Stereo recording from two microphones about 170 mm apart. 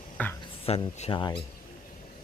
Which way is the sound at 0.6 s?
40° left (ahead or behind).